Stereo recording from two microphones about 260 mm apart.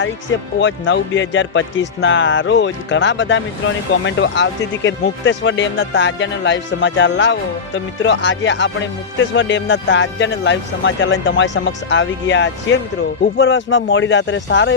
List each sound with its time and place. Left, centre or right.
0.6 s a man's voice: left